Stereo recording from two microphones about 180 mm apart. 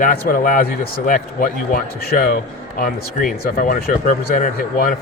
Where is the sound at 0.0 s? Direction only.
50° left (ahead or behind).